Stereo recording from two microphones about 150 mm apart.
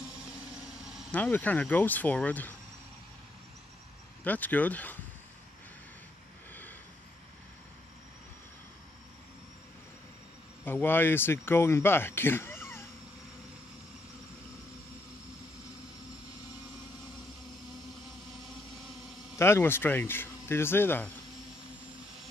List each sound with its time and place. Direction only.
0.5 s vehicle: 5° right (ahead or behind)
1.1 s speech: 10° left (ahead or behind)
4.2 s speech: 10° left (ahead or behind)
10.6 s speech: 15° left (ahead or behind)
19.3 s speech: 15° left (ahead or behind)